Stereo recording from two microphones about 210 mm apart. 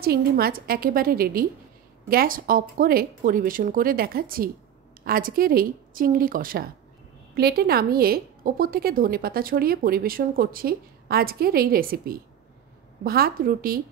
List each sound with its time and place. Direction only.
0.0 s a woman's voice: 45° right (ahead or behind)